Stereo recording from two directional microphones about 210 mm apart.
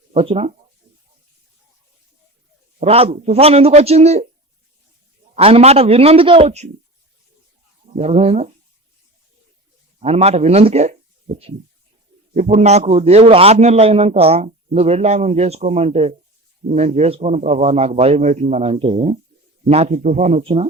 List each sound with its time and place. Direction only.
0.1 s speech: 30° right (ahead or behind)
2.8 s a man's voice: 30° right (ahead or behind)
5.4 s a man's voice: 25° right (ahead or behind)
7.9 s a man's voice: 30° right (ahead or behind)
10.0 s a man's voice: 30° right (ahead or behind)
12.3 s a man's voice: 35° right (ahead or behind)